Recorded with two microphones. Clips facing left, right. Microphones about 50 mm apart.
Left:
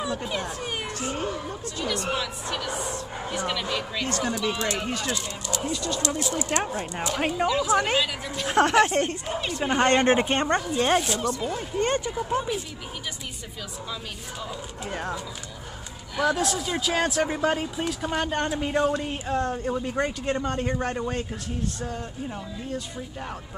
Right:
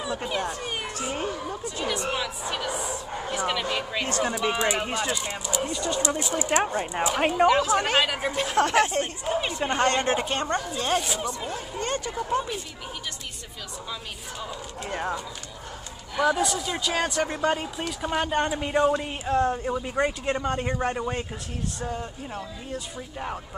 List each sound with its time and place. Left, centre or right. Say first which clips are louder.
0.0 s speech: right 1 dB; centre
1.1 s a woman's voice: even; centre
7.4 s a woman's voice: right 1 dB; right
8.5 s speech: left 3 dB; left
9.2 s a woman's voice: right 3 dB; centre
9.8 s speech: left 4 dB; left
11.1 s a woman's voice: left 3 dB; centre
11.8 s speech: left 5 dB; left
12.1 s speech: left 1 dB; centre
14.4 s a woman's voice: even; centre